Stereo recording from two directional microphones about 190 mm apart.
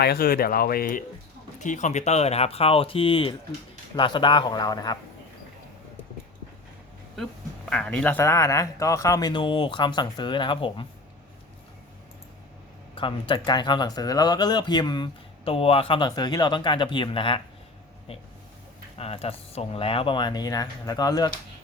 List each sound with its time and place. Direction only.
0.0 s speech: 55° left (ahead or behind); by 4.9 s 20° left (ahead or behind)
7.7 s speech: 5° left (ahead or behind); by 10.8 s 25° left (ahead or behind)
13.0 s speech: 25° left (ahead or behind)
18.9 s speech: 30° left (ahead or behind)